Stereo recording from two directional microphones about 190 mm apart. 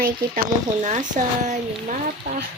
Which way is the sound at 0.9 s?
40° right (ahead or behind).